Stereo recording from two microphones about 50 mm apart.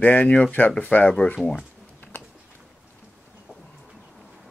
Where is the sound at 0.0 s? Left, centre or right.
Left.